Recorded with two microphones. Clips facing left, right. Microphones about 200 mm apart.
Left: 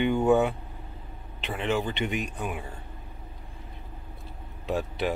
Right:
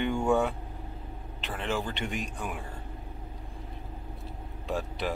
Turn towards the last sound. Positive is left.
turn(degrees=5)  # may be behind; listen again after turning